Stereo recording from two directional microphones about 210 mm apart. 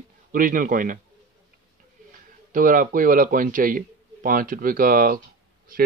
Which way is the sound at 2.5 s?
40° right (ahead or behind).